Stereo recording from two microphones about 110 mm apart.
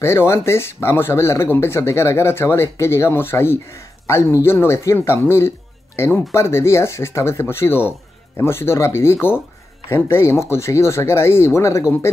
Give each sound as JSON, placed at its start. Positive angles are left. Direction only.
{"t": 0.0, "sound": "speech", "side_deg": 25}